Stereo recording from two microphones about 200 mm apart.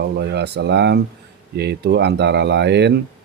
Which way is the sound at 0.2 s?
55° right (ahead or behind).